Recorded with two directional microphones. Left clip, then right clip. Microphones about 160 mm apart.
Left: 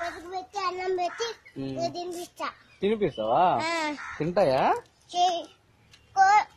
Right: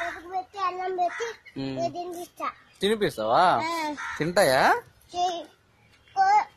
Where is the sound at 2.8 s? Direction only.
5° right (ahead or behind).